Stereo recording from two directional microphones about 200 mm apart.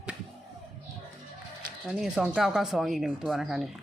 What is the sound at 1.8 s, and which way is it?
Speech, 5° right (ahead or behind).